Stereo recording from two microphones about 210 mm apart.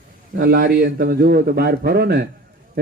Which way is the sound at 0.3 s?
45° right (ahead or behind).